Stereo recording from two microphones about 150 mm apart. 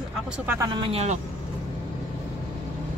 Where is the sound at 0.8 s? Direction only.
45° right (ahead or behind).